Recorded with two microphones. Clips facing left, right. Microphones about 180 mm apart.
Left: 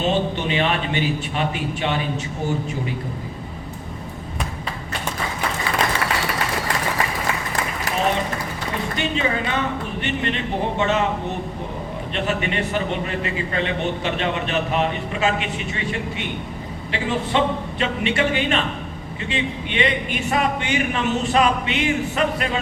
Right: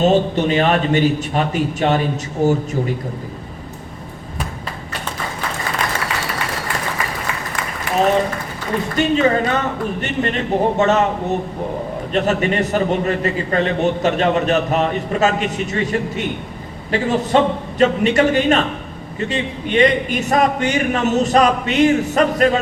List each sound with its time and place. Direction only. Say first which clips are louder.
0.0 s a man's voice: right 7 dB; 40° right (ahead or behind)
9.0 s a man's voice: right 9 dB; 40° right (ahead or behind)
12.1 s a man's voice: right 7 dB; 40° right (ahead or behind)